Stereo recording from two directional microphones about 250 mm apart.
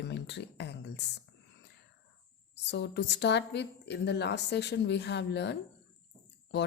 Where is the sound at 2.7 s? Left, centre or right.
Left.